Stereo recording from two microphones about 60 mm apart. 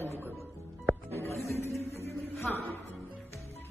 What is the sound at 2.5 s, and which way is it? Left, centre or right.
Speech, centre.